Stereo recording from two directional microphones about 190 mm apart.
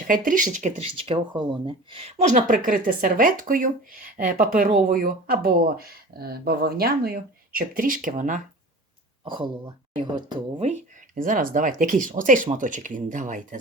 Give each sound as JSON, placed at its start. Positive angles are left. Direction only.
{"t": 0.1, "sound": "speech", "side_deg": -45}
{"t": 0.5, "sound": "speech", "side_deg": -35}
{"t": 9.2, "sound": "speech", "side_deg": -25}
{"t": 10.7, "sound": "speech", "side_deg": -45}